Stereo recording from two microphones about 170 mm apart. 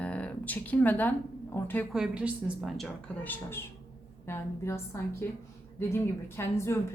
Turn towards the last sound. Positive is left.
turn(degrees=15)  # may be behind; listen again after turning